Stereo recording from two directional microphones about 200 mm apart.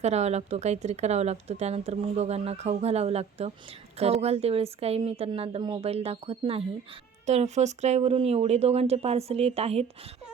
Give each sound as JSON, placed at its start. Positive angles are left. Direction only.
{"t": 0.0, "sound": "a woman's voice", "side_deg": -35}